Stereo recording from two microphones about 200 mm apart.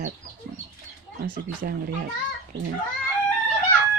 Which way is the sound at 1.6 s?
50° right (ahead or behind).